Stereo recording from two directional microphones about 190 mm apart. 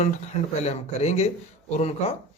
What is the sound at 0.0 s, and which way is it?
Speech, 35° left (ahead or behind).